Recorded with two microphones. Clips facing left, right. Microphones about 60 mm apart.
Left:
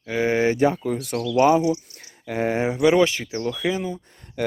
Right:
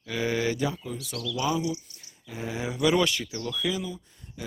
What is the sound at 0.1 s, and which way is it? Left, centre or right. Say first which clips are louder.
Speech: left 7 dB; left.